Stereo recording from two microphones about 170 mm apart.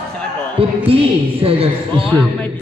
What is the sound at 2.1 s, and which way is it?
Speech, 10° left (ahead or behind).